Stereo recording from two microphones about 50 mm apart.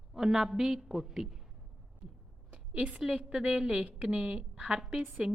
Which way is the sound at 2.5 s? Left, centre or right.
Right.